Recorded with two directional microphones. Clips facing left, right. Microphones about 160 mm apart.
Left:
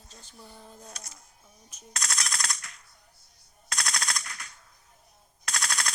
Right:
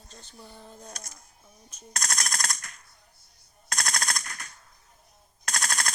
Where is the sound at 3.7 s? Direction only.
45° right (ahead or behind).